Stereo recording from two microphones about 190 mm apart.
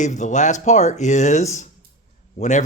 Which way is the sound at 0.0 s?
40° left (ahead or behind).